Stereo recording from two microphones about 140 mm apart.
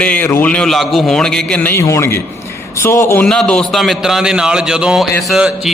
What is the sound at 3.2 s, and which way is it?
A man's voice, 5° left (ahead or behind).